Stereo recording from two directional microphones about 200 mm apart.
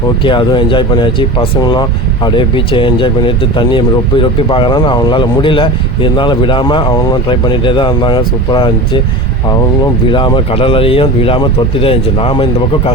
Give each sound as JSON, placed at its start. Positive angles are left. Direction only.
{"t": 0.2, "sound": "speech", "side_deg": 25}
{"t": 10.1, "sound": "speech", "side_deg": 25}